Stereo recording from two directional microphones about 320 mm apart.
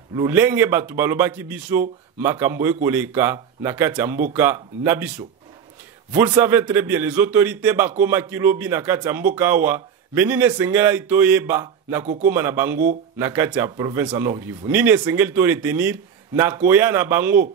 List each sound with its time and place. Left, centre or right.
0.1 s speech: centre
12.0 s speech: right
12.3 s speech: centre